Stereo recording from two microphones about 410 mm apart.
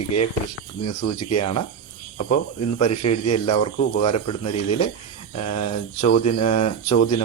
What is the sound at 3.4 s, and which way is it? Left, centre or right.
Speech, centre.